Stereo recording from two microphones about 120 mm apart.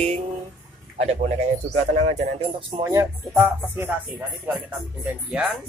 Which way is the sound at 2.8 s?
25° right (ahead or behind).